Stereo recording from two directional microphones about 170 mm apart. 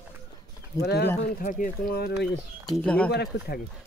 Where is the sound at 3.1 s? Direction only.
70° left (ahead or behind).